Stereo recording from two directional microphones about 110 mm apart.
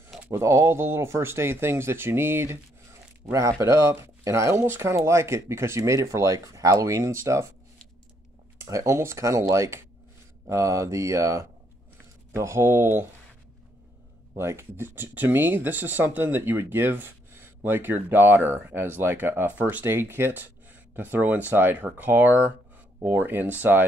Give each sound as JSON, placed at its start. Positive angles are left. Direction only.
{"t": 0.2, "sound": "speech", "side_deg": -25}
{"t": 8.5, "sound": "speech", "side_deg": -25}
{"t": 14.3, "sound": "speech", "side_deg": -25}